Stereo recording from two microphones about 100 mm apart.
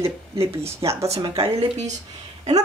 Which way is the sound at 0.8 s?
50° right (ahead or behind).